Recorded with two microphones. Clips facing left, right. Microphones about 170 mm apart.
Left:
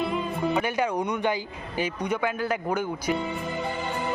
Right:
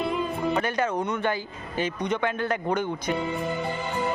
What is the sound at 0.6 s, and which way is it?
Speech, 10° left (ahead or behind).